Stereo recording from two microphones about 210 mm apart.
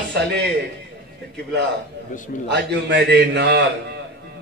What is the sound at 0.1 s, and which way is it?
Speech, 50° right (ahead or behind).